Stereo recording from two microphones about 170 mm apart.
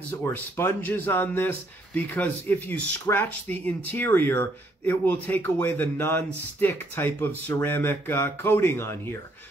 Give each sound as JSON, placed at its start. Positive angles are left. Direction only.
{"t": 0.1, "sound": "a man's voice", "side_deg": 15}